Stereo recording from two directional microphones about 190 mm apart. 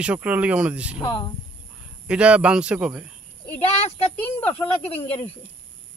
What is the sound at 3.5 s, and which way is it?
Speech, 30° left (ahead or behind).